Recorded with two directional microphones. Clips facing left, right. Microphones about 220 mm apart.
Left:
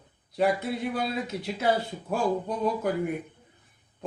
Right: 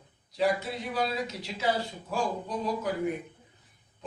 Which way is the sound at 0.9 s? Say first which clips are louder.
Left 1 dB; 55° left (ahead or behind).